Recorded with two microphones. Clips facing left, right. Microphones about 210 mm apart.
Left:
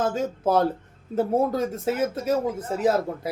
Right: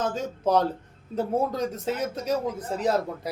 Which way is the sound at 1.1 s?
5° left (ahead or behind).